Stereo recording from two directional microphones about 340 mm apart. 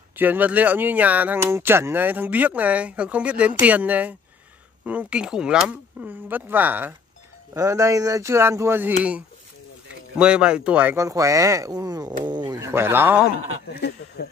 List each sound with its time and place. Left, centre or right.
0.1 s speech: centre
10.1 s speech: centre
13.7 s speech: left